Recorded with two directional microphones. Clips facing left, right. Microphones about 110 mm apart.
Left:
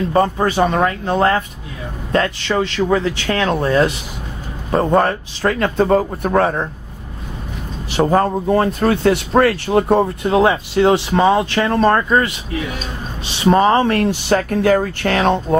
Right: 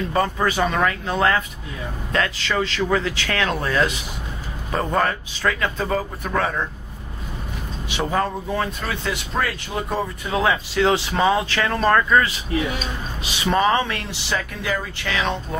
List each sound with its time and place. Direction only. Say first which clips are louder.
0.1 s speech: left 5 dB; 30° left (ahead or behind)
7.9 s speech: left 8 dB; 40° left (ahead or behind)